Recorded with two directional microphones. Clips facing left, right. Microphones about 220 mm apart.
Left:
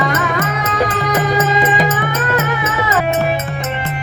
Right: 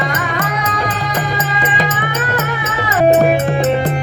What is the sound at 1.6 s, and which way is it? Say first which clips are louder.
Music: left 3 dB; 45° left (ahead or behind).